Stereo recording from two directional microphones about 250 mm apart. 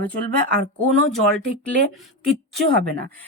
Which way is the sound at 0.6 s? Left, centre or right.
Right.